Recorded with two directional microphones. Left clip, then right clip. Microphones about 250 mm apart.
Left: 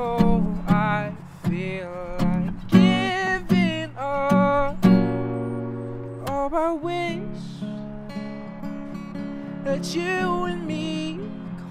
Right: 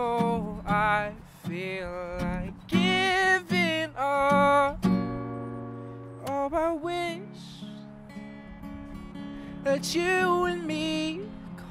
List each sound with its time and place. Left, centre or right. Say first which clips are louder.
0.0 s music: left 3 dB; right
6.3 s music: left 4 dB; right
9.7 s music: even; right